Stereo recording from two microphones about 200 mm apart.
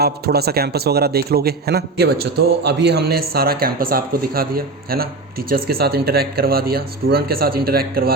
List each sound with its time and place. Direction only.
0.0 s a man's voice: 50° right (ahead or behind)